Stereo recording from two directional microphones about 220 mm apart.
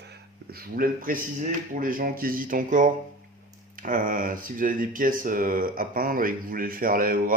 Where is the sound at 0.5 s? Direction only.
40° right (ahead or behind).